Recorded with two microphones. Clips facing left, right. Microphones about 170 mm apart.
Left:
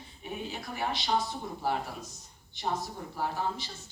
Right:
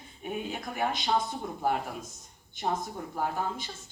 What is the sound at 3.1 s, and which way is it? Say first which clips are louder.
Speech: right 1 dB; 50° right (ahead or behind).